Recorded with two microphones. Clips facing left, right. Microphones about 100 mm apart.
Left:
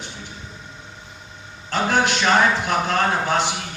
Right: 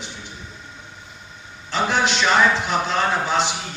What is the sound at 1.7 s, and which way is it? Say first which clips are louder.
Speech: left 1 dB; 50° left (ahead or behind).